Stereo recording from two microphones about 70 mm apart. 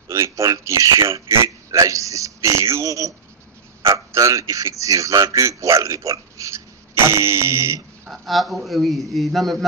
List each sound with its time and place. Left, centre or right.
0.1 s a man's voice: right
8.1 s a man's voice: centre